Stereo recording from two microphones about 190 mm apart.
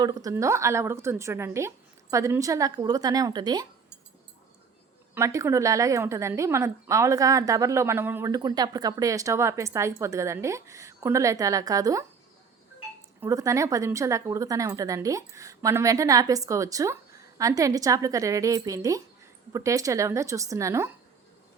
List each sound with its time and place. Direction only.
0.0 s a woman's voice: 20° right (ahead or behind)
5.1 s a woman's voice: 15° right (ahead or behind)
13.2 s a woman's voice: 15° right (ahead or behind)